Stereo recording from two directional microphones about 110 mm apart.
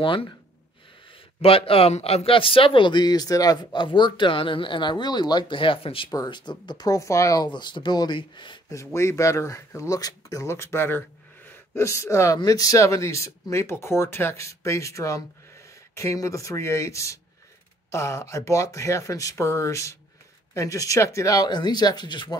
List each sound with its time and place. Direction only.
0.0 s speech: 50° left (ahead or behind)
1.4 s a man's voice: 60° left (ahead or behind); by 3.5 s 35° left (ahead or behind)
3.7 s speech: 45° left (ahead or behind)
6.1 s speech: 40° left (ahead or behind)
7.4 s speech: 45° left (ahead or behind)
8.6 s speech: 25° left (ahead or behind); by 22.4 s 45° left (ahead or behind)